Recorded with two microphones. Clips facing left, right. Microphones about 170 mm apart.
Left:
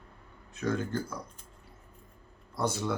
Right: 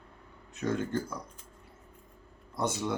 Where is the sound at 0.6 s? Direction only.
25° right (ahead or behind).